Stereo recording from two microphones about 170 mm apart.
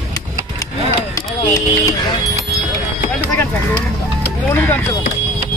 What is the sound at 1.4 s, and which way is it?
Speech, 20° left (ahead or behind).